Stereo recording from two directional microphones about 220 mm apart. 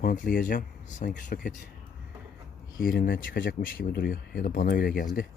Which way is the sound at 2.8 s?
40° left (ahead or behind).